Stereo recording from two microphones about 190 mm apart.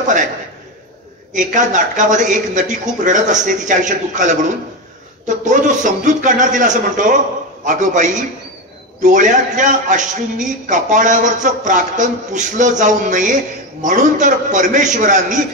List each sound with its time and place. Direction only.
1.3 s a man's voice: 40° right (ahead or behind)